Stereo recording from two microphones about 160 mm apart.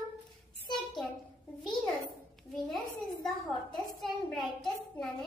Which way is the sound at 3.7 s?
Centre (ahead or behind).